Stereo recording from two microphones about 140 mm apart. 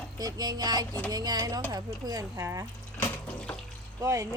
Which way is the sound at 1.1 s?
30° right (ahead or behind).